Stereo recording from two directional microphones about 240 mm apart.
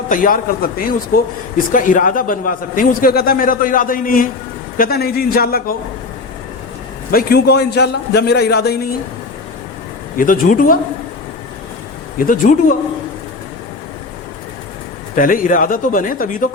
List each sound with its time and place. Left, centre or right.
0.1 s a man's voice: left
7.1 s a man's voice: left
10.2 s a man's voice: left
12.2 s a man's voice: left
15.1 s a man's voice: left